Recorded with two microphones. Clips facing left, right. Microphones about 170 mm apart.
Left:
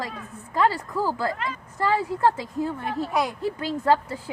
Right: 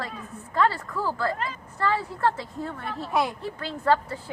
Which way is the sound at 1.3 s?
40° right (ahead or behind).